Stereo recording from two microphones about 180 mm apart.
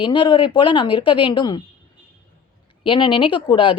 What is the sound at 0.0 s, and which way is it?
Speech, 25° left (ahead or behind).